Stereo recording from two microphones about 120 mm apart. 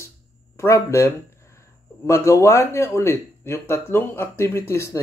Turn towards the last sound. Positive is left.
turn(degrees=25)  # may be behind; listen again after turning